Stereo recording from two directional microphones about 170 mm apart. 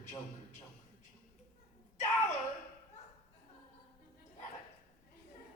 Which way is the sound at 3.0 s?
45° left (ahead or behind).